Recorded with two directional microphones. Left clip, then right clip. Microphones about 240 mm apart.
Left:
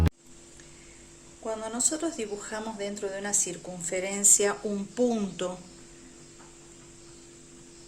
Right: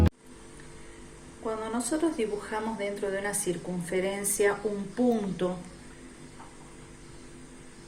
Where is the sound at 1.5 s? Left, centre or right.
Left.